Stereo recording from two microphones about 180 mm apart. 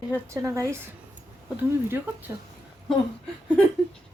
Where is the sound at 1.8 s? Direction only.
10° right (ahead or behind).